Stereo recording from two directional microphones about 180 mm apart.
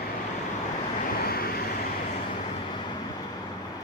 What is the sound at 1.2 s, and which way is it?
Vehicle, 55° left (ahead or behind).